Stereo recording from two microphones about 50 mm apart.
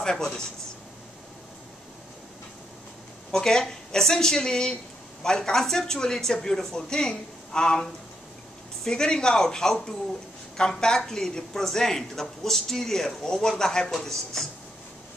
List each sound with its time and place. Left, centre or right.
0.0 s a woman's voice: centre
3.3 s a woman's voice: centre